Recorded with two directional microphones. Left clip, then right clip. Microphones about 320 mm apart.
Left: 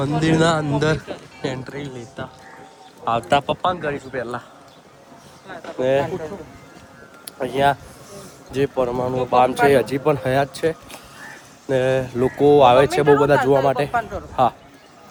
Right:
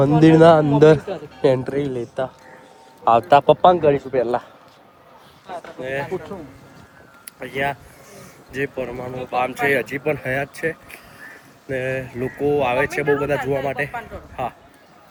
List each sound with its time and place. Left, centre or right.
0.0 s speech: centre
3.4 s a man's voice: right
7.3 s speech: centre
11.9 s speech: centre